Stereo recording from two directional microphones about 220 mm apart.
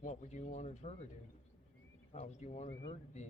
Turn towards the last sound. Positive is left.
turn(degrees=25)  # may be behind; listen again after turning